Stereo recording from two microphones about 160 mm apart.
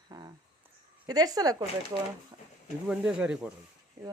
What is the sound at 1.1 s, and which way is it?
Speech, 25° right (ahead or behind).